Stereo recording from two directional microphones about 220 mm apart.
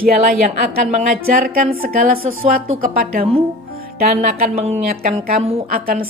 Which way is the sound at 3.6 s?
40° right (ahead or behind).